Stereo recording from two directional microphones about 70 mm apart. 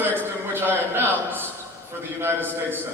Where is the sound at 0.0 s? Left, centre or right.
Right.